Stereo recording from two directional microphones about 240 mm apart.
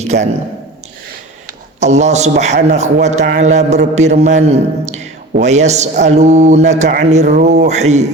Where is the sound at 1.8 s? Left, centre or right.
Right.